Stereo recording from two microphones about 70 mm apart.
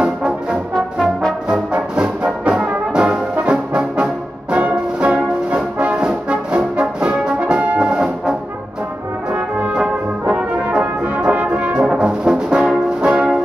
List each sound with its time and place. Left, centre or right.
0.0 s brass instrument: centre
1.5 s music: centre
5.5 s brass instrument: centre